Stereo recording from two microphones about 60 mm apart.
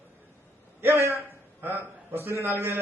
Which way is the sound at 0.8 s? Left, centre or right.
Right.